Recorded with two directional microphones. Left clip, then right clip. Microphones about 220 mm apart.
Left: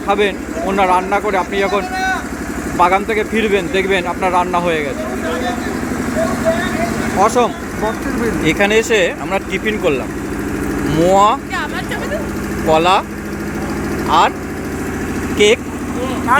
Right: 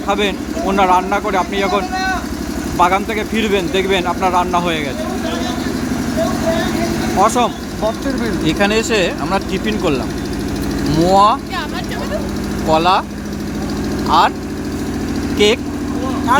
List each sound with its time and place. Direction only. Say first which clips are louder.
0.1 s speech: left 2 dB; centre (ahead or behind)
7.2 s speech: left 1 dB; centre (ahead or behind)
12.6 s speech: left 1 dB; 5° left (ahead or behind)
14.1 s speech: even; centre (ahead or behind)
15.4 s speech: left 2 dB; 5° left (ahead or behind)
16.3 s speech: left 1 dB; 25° right (ahead or behind)